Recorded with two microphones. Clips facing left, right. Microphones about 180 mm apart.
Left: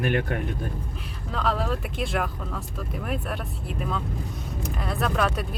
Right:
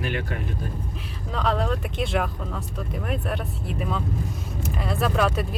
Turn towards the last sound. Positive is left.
turn(degrees=0)  # may be behind; listen again after turning